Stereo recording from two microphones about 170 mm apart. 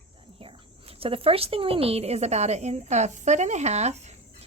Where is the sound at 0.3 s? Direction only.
35° right (ahead or behind).